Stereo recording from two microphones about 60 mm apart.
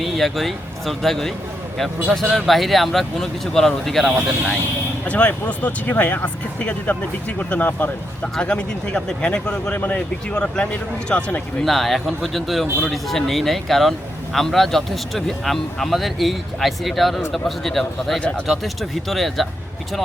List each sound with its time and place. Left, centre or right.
0.0 s speech: centre
4.1 s speech: centre
5.0 s speech: left
8.2 s speech: centre
9.7 s speech: left
10.3 s speech: centre
10.7 s speech: left
11.6 s speech: centre
18.2 s speech: centre
18.4 s speech: centre